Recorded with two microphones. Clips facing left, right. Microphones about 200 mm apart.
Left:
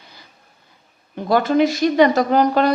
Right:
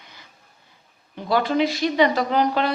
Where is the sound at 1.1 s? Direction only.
45° left (ahead or behind).